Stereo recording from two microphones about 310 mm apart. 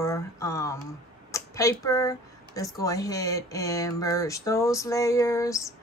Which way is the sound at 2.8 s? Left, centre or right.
Centre.